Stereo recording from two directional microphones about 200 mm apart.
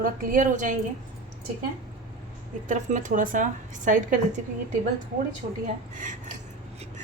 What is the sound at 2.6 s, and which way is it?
A woman's voice, 40° right (ahead or behind).